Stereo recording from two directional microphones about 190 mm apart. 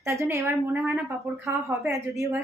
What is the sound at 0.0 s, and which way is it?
A woman's voice, 15° right (ahead or behind).